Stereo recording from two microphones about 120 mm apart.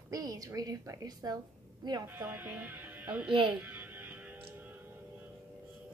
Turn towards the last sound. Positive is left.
turn(degrees=-15)  # may be behind; listen again after turning